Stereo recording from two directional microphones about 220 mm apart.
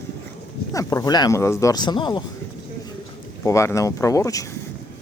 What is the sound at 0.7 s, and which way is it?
Speech, 15° left (ahead or behind).